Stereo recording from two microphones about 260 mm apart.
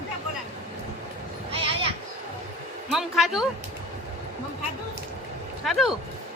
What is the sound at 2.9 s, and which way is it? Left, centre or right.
Speech, centre.